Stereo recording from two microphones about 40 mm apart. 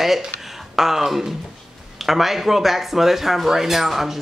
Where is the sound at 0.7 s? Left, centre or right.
Centre.